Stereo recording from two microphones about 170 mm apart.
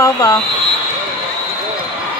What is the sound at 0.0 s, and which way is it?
Speech, 20° left (ahead or behind).